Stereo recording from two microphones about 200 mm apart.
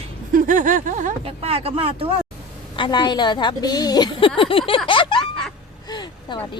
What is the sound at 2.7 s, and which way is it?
A woman's voice, 25° left (ahead or behind).